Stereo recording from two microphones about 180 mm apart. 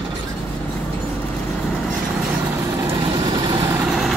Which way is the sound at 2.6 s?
20° right (ahead or behind).